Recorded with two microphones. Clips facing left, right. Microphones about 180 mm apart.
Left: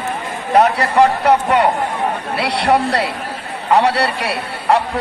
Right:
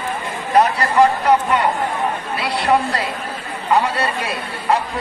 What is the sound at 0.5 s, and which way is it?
A man's voice, 65° left (ahead or behind).